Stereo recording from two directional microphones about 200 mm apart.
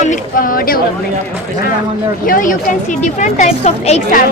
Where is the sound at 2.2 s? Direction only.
40° left (ahead or behind).